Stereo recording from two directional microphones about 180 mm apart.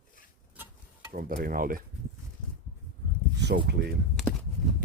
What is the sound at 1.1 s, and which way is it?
Speech, 55° right (ahead or behind).